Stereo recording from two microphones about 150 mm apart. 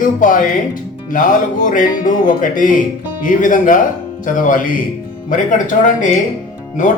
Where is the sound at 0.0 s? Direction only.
60° left (ahead or behind).